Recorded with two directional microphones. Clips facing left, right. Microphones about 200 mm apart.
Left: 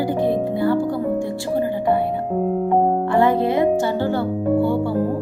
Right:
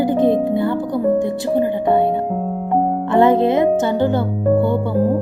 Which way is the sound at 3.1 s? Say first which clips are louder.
Right 7 dB; 20° right (ahead or behind).